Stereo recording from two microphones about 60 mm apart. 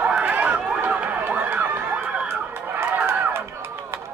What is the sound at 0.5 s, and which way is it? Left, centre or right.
Run, centre.